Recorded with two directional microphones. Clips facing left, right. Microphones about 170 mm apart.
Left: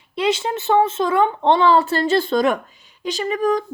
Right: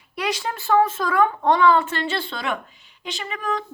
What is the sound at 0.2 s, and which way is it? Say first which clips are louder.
A woman's voice: left 6 dB; 25° left (ahead or behind).